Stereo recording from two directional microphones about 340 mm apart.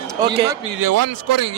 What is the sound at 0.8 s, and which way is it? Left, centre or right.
Speech, right.